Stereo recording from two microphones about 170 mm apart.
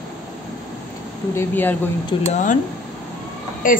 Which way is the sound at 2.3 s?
50° left (ahead or behind).